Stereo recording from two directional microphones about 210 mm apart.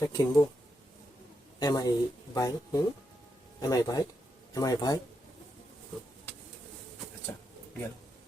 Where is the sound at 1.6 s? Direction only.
20° left (ahead or behind).